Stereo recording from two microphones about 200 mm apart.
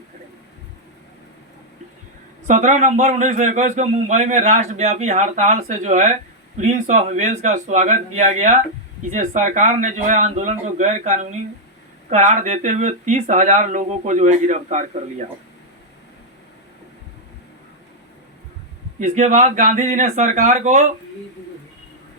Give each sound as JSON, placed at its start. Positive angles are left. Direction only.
{"t": 2.5, "sound": "a man's voice", "side_deg": -40}
{"t": 18.9, "sound": "a man's voice", "side_deg": -35}